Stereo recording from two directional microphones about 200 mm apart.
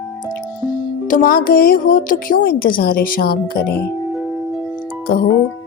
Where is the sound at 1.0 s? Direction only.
45° left (ahead or behind).